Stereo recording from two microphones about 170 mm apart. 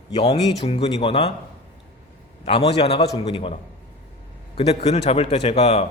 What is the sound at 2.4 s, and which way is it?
A man's voice, 35° left (ahead or behind).